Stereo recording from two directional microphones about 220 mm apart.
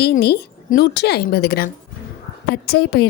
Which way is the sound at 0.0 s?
45° left (ahead or behind).